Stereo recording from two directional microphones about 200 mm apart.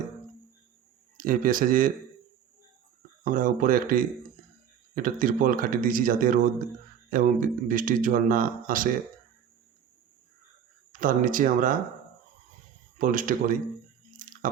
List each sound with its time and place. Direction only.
1.1 s speech: 45° right (ahead or behind)
3.2 s speech: 45° right (ahead or behind)
11.0 s speech: 45° right (ahead or behind)
13.0 s speech: 40° right (ahead or behind)
14.2 s chewing: 40° right (ahead or behind)